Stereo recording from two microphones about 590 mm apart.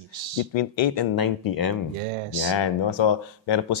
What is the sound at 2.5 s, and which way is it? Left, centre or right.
Speech, left.